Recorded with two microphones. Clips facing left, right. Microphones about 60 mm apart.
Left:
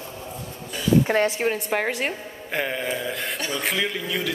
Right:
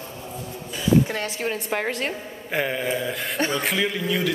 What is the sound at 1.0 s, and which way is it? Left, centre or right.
Speech, left.